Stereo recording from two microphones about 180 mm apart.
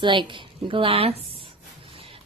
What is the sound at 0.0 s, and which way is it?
A woman's voice, 25° right (ahead or behind).